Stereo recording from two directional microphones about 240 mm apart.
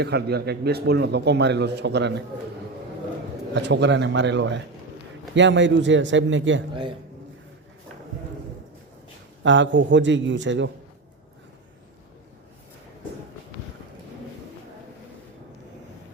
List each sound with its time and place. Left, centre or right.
0.0 s a man's voice: right
3.5 s a man's voice: right
9.4 s a man's voice: right